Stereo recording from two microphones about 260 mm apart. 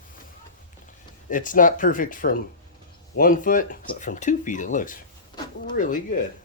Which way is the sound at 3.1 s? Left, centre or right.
Left.